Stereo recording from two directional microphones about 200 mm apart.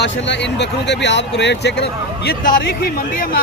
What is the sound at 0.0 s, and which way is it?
Speech, 60° left (ahead or behind).